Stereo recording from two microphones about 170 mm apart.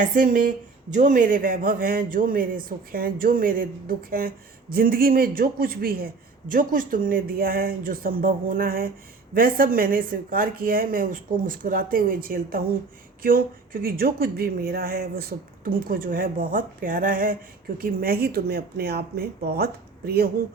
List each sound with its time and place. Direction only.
0.0 s a man's voice: 50° right (ahead or behind)